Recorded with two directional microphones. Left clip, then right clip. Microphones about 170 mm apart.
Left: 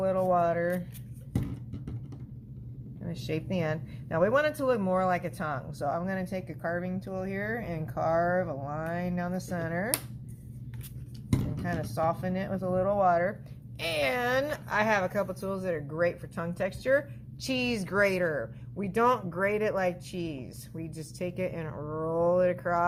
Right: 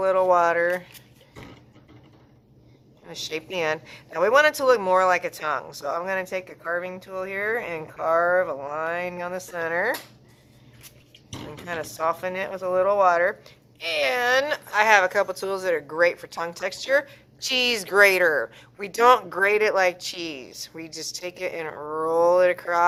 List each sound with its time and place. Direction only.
0.0 s speech: 30° right (ahead or behind)
3.1 s speech: 20° right (ahead or behind)
11.3 s speech: 25° right (ahead or behind)
13.7 s speech: 5° right (ahead or behind)